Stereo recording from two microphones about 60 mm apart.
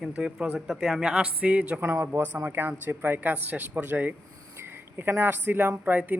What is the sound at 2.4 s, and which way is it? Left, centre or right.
Speech, right.